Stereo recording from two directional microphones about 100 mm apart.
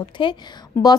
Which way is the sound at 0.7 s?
25° left (ahead or behind).